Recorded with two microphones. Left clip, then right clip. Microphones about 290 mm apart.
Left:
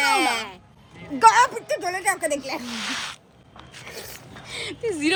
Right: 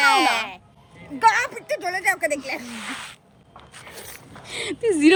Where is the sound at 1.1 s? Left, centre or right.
Centre.